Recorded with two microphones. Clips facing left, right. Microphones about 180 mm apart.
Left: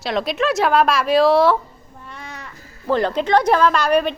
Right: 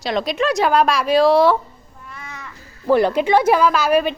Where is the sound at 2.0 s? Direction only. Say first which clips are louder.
Left 1 dB; 35° left (ahead or behind).